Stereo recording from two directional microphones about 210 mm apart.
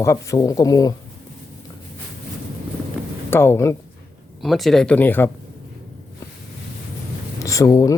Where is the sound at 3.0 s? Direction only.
5° right (ahead or behind).